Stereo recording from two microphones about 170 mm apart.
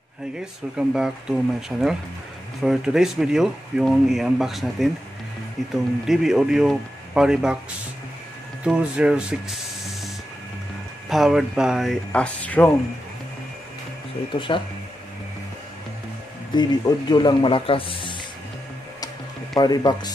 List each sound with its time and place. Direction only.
0.7 s speech: 5° right (ahead or behind)
8.6 s speech: 5° right (ahead or behind)
14.3 s speech: 30° left (ahead or behind)
16.5 s speech: 25° left (ahead or behind)
19.5 s speech: 25° left (ahead or behind)